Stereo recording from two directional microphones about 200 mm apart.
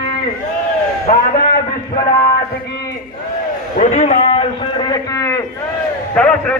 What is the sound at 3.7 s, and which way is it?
A man's voice, 35° left (ahead or behind).